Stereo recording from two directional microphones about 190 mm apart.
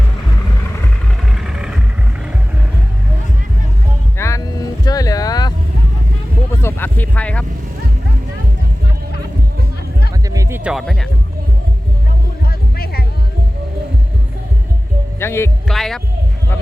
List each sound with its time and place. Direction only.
1.4 s vehicle: 5° right (ahead or behind)
4.2 s vehicle: 15° left (ahead or behind)
6.5 s a sound: 10° left (ahead or behind)
10.2 s music: 15° right (ahead or behind); by 11.1 s centre (ahead or behind)
12.5 s music: 55° left (ahead or behind)
15.2 s music: 15° left (ahead or behind)
15.7 s music: centre (ahead or behind)